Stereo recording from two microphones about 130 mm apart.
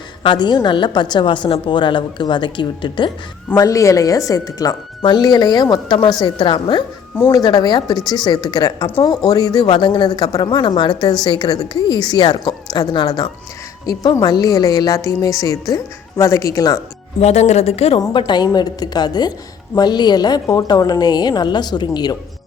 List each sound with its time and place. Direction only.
0.2 s a woman's voice: 35° left (ahead or behind)
3.5 s a woman's voice: 25° left (ahead or behind)
17.2 s a woman's voice: 55° left (ahead or behind)
18.3 s a woman's voice: 30° left (ahead or behind)